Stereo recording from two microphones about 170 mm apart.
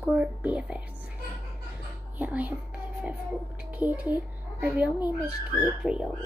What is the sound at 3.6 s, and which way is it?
A child's voice, 10° right (ahead or behind).